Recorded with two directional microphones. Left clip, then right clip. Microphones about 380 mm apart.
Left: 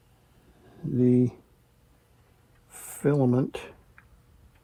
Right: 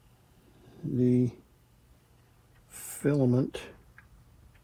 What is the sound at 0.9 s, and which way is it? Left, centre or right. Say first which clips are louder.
Speech: left 4 dB; centre.